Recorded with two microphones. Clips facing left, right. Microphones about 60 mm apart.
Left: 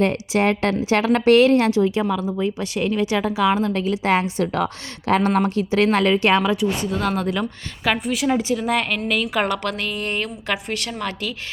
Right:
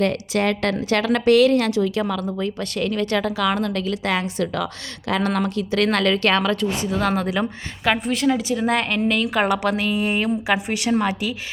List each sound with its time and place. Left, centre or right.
0.0 s a woman's voice: left
2.0 s a woman's voice: centre
6.7 s speech: centre
8.3 s a woman's voice: left
8.5 s a woman's voice: centre